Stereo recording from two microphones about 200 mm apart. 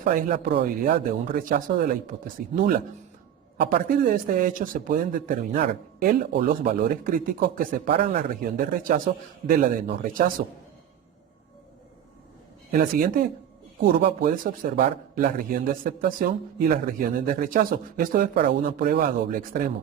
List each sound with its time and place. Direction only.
0.0 s a man's voice: 45° right (ahead or behind)
12.7 s a man's voice: 45° right (ahead or behind)